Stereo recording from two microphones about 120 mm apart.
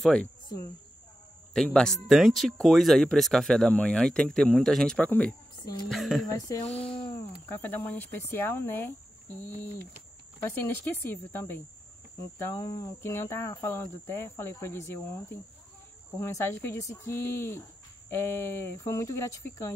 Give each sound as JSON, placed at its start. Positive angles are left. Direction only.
{"t": 0.0, "sound": "speech", "side_deg": 5}
{"t": 1.5, "sound": "speech", "side_deg": 5}
{"t": 5.9, "sound": "speech", "side_deg": 0}
{"t": 6.3, "sound": "speech", "side_deg": 30}
{"t": 6.7, "sound": "speech", "side_deg": 10}
{"t": 10.4, "sound": "speech", "side_deg": 20}
{"t": 16.2, "sound": "speech", "side_deg": 25}